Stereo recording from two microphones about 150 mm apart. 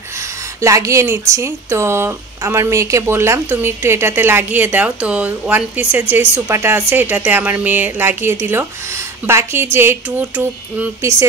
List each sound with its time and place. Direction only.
0.2 s a woman's voice: 20° right (ahead or behind)